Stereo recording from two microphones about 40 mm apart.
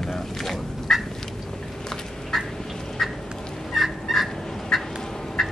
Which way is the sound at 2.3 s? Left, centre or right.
Centre.